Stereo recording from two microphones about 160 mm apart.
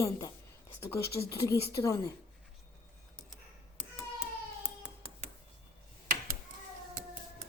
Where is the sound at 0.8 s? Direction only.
20° left (ahead or behind).